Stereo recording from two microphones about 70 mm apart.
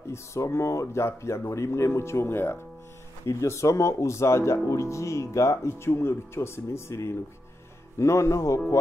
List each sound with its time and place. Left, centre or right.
0.0 s speech: left